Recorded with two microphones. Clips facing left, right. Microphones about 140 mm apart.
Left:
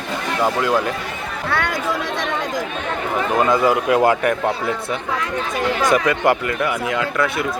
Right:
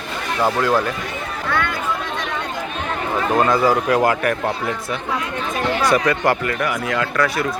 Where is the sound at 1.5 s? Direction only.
75° left (ahead or behind).